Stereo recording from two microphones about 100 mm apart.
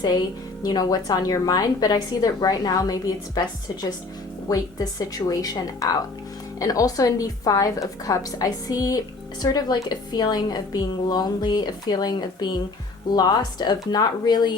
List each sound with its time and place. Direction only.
0.6 s a woman's voice: 40° left (ahead or behind)
4.4 s a woman's voice: 40° left (ahead or behind)